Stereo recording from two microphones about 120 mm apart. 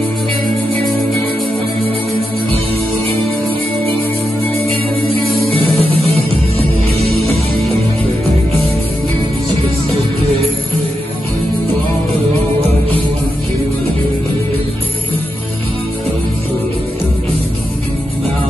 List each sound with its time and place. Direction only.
5.5 s music: 55° right (ahead or behind)